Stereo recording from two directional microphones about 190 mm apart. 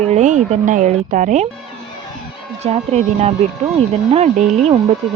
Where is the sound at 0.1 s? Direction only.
40° right (ahead or behind).